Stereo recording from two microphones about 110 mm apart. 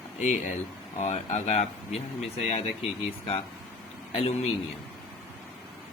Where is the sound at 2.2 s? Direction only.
80° left.